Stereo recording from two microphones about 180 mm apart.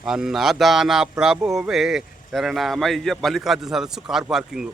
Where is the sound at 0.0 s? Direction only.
5° right (ahead or behind).